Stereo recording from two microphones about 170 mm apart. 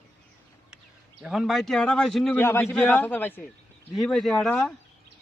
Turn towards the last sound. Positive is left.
turn(degrees=5)  # may be behind; listen again after turning